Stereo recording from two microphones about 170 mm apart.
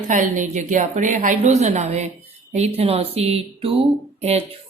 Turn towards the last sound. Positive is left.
turn(degrees=-35)  # may be behind; listen again after turning